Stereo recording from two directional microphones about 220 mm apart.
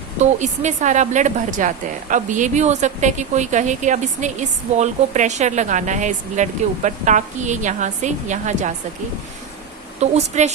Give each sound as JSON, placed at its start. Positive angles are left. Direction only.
{"t": 0.2, "sound": "speech", "side_deg": -30}
{"t": 10.0, "sound": "speech", "side_deg": -30}